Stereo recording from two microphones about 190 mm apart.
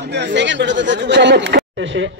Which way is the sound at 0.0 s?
65° right (ahead or behind).